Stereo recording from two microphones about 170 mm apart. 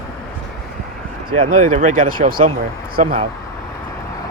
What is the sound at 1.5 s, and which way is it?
Speech, 50° right (ahead or behind).